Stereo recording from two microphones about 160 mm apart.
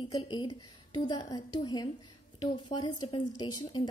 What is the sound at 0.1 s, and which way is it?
A woman's voice, 25° left (ahead or behind).